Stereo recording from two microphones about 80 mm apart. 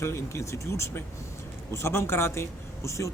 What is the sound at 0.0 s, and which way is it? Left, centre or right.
A man's voice, left.